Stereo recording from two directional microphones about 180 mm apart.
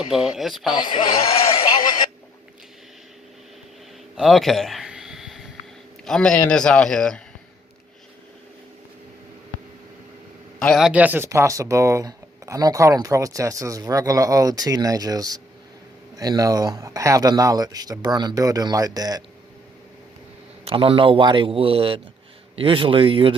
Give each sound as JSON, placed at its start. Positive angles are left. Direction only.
{"t": 0.1, "sound": "speech", "side_deg": 0}
{"t": 0.9, "sound": "a sound", "side_deg": 30}
{"t": 4.2, "sound": "a sound", "side_deg": 0}
{"t": 6.1, "sound": "speech", "side_deg": 5}
{"t": 10.6, "sound": "speech", "side_deg": 0}
{"t": 20.7, "sound": "a man's voice", "side_deg": -30}